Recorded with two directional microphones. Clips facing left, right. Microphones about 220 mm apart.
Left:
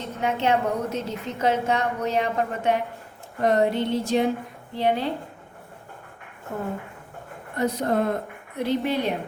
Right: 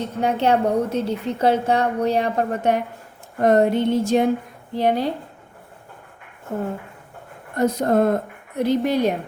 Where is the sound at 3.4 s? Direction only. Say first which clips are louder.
Right 5 dB; 50° right (ahead or behind).